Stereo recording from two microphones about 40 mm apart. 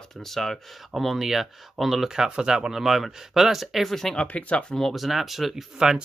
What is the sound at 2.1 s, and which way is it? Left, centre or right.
Speech, centre.